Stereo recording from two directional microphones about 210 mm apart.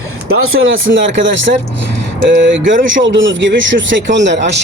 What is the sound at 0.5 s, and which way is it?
Speech, 65° right (ahead or behind).